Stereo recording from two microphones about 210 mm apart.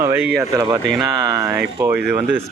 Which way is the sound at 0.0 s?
10° right (ahead or behind).